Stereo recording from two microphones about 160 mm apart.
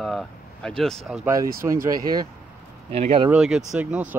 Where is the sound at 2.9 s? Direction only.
40° right (ahead or behind).